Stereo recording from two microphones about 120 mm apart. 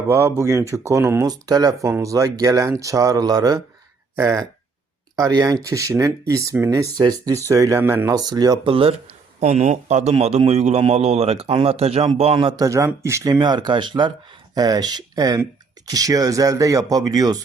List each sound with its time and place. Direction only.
0.1 s speech: 25° right (ahead or behind)
8.1 s speech: 35° right (ahead or behind)
8.7 s a man's voice: 55° right (ahead or behind)
12.5 s speech: 25° right (ahead or behind)
13.4 s speech: 40° right (ahead or behind)